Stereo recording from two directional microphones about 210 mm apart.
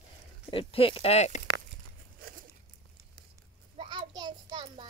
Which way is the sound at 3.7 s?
20° right (ahead or behind).